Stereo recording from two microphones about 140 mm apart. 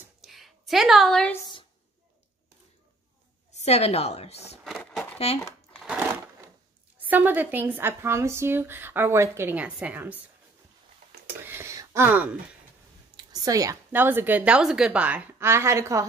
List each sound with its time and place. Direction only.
0.2 s a sound: centre (ahead or behind)
3.5 s a woman's voice: 50° left (ahead or behind)
4.6 s speech: centre (ahead or behind)
5.3 s a woman's voice: 45° left (ahead or behind)
7.0 s speech: 10° right (ahead or behind)
11.4 s speech: 20° right (ahead or behind)
13.1 s a sound: 30° right (ahead or behind)
13.9 s speech: 15° right (ahead or behind)